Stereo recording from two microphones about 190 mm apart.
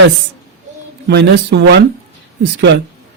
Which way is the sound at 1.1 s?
65° right (ahead or behind).